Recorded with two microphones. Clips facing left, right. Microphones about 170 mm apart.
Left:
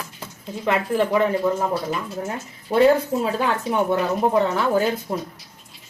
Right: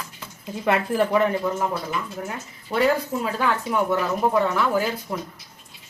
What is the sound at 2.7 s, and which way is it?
Speech, 25° left (ahead or behind).